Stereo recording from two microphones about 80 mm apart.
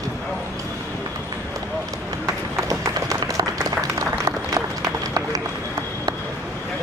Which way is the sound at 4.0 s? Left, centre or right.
Right.